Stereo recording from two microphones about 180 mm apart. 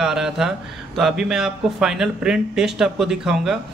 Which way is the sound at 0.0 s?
5° right (ahead or behind).